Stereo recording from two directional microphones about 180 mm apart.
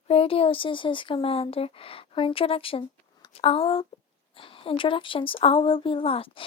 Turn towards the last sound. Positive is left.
turn(degrees=30)  # may be behind; listen again after turning